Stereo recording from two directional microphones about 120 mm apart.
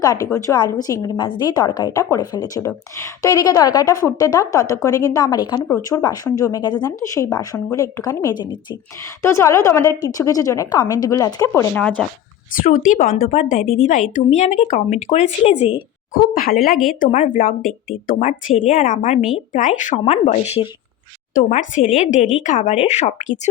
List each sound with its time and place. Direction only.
0.0 s a woman's voice: 25° left (ahead or behind)
5.6 s a woman's voice: 20° left (ahead or behind)
6.0 s a woman's voice: 30° left (ahead or behind)
9.2 s a woman's voice: 25° left (ahead or behind)
11.7 s speech: 10° left (ahead or behind)
12.7 s speech: 90° left; by 15.5 s 65° left (ahead or behind)
16.6 s speech: centre (ahead or behind)
17.1 s speech: 85° left
18.7 s speech: 90° left; by 20.6 s 60° left (ahead or behind)
21.3 s speech: 90° left
22.8 s speech: 70° left (ahead or behind)